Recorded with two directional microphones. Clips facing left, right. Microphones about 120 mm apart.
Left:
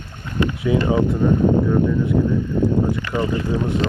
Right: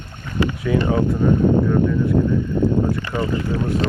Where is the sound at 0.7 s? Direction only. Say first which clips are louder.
Left 1 dB; 15° left (ahead or behind).